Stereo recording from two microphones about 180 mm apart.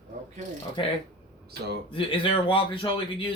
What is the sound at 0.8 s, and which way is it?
Speech, 25° left (ahead or behind).